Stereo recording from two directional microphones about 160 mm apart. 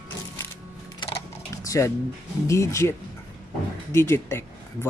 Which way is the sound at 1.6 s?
20° left (ahead or behind).